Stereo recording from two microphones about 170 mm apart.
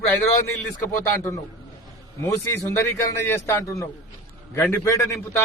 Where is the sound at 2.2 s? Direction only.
15° left (ahead or behind).